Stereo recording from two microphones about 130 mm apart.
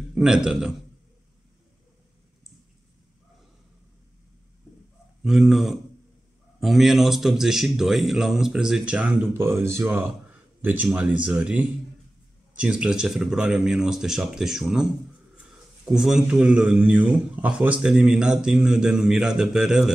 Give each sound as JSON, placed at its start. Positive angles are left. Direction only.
{"t": 0.1, "sound": "a man's voice", "side_deg": -5}
{"t": 5.2, "sound": "a man's voice", "side_deg": 0}
{"t": 9.4, "sound": "a man's voice", "side_deg": -20}